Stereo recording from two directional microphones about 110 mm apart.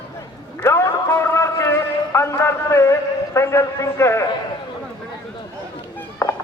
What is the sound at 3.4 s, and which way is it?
Speech, 25° left (ahead or behind).